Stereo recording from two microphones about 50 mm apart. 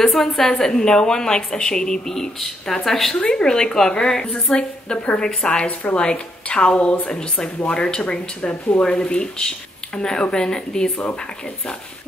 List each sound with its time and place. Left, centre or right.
0.0 s a woman's voice: centre
3.2 s a woman's voice: centre